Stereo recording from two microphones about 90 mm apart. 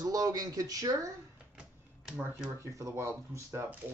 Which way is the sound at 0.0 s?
45° right (ahead or behind).